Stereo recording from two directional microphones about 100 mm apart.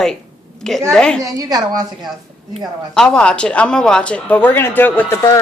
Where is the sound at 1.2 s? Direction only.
35° right (ahead or behind).